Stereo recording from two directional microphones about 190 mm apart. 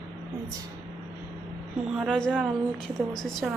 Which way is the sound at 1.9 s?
Centre (ahead or behind).